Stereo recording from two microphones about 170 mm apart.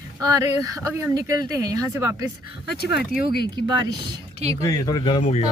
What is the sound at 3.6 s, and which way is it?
Speech, 25° right (ahead or behind).